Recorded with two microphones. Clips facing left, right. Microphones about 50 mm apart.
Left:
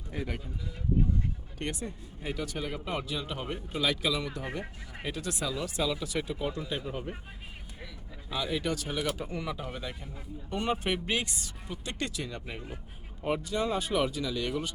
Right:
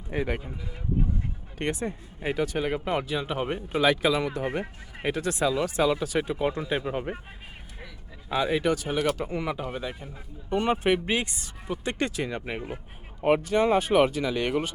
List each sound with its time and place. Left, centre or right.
0.1 s speech: right
8.3 s speech: right
9.0 s speech: right
9.2 s speech: right
9.6 s speech: centre; by 14.7 s right